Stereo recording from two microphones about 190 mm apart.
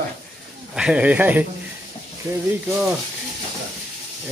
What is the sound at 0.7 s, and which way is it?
Speech, 5° right (ahead or behind).